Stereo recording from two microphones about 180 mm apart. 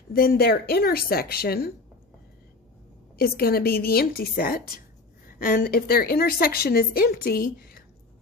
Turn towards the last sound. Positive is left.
turn(degrees=55)  # may be behind; listen again after turning